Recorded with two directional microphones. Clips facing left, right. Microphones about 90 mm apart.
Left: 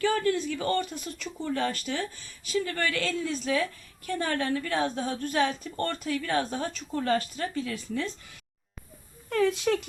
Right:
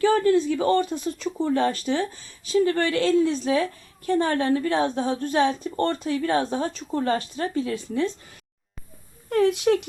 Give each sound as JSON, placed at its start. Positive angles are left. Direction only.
{"t": 0.0, "sound": "speech", "side_deg": -25}
{"t": 9.7, "sound": "speech", "side_deg": -35}